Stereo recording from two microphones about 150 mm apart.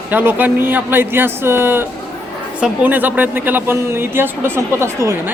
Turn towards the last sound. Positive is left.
turn(degrees=-20)  # may be behind; listen again after turning